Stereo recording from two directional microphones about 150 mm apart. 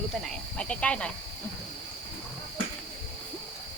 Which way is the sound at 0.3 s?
5° left (ahead or behind).